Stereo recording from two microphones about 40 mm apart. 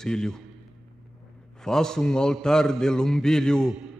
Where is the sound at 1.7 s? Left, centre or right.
Centre.